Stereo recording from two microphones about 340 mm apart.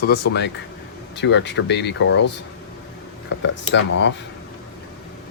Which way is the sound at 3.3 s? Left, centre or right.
Left.